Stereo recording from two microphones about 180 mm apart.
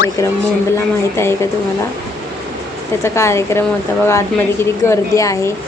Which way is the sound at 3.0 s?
15° left (ahead or behind).